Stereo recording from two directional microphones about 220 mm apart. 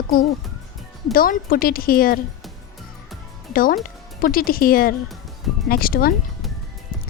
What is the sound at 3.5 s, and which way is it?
Speech, 40° left (ahead or behind).